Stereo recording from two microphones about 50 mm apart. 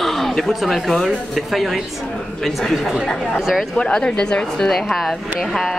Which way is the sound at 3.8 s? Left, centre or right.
Centre.